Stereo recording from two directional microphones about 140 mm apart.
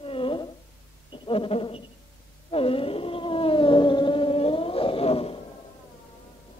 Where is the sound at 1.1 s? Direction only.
35° left (ahead or behind).